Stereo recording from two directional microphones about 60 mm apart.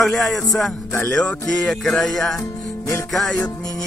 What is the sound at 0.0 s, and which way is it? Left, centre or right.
Music, centre.